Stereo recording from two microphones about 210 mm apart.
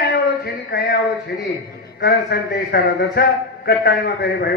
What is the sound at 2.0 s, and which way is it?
A man's voice, 50° left (ahead or behind).